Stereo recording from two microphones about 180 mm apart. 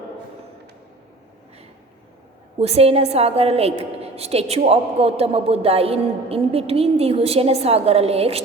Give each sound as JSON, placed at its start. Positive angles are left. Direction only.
{"t": 2.6, "sound": "a woman's voice", "side_deg": -35}